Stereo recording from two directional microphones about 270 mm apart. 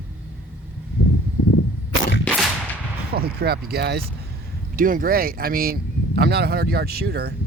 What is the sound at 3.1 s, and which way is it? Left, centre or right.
Speech, right.